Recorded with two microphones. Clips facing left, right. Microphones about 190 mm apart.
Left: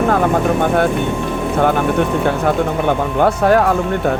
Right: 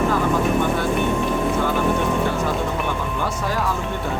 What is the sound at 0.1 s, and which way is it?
Vehicle, 60° left (ahead or behind).